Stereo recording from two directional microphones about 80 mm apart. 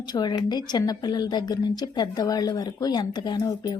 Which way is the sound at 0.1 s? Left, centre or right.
Left.